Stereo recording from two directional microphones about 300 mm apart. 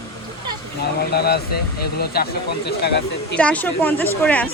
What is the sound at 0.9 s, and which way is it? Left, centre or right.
Speech, left.